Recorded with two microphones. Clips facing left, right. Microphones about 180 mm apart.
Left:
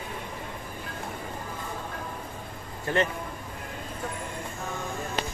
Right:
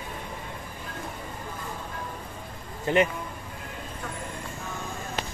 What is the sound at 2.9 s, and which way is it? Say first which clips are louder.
Speech: right 4 dB; 20° right (ahead or behind).